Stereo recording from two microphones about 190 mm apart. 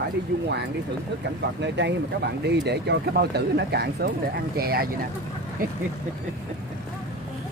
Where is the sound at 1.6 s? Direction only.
65° right (ahead or behind).